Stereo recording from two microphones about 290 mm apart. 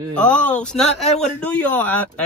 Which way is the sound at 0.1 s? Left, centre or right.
Centre.